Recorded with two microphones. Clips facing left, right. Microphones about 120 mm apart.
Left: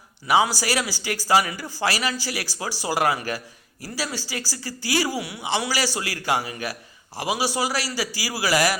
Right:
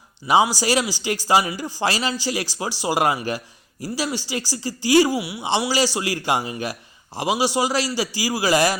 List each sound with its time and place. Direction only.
0.3 s speech: 25° right (ahead or behind)
5.4 s speech: 25° right (ahead or behind)